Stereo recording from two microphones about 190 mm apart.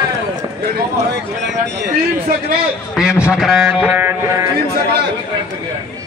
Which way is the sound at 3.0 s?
5° right (ahead or behind).